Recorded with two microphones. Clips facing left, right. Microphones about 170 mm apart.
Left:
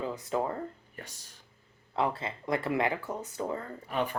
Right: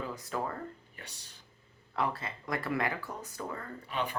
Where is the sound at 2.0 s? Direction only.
25° left (ahead or behind).